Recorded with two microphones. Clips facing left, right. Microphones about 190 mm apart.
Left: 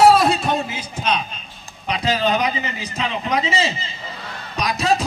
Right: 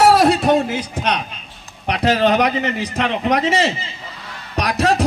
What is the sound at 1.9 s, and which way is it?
A man's voice, 70° right (ahead or behind).